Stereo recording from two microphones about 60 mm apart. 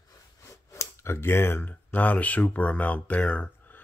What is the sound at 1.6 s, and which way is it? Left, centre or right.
Speech, left.